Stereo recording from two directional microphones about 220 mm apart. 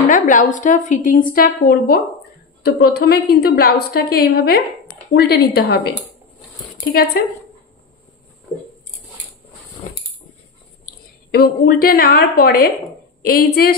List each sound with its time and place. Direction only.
0.1 s a woman's voice: 35° left (ahead or behind)
11.3 s a woman's voice: 45° left (ahead or behind)